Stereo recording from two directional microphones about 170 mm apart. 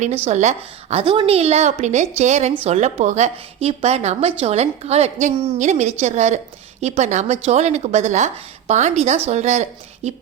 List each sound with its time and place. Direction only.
0.0 s a woman's voice: 45° right (ahead or behind)